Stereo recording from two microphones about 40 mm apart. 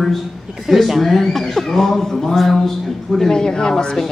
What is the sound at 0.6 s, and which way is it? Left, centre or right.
A man's voice, centre.